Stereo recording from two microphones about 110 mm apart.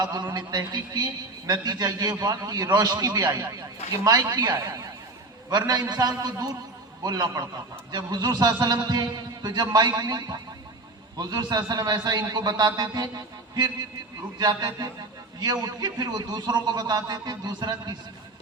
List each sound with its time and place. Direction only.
0.0 s a man's voice: 35° right (ahead or behind)